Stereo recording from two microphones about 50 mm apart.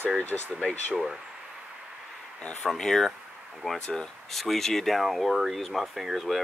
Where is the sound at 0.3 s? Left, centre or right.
Centre.